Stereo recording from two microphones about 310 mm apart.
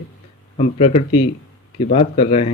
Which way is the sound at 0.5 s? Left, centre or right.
Centre.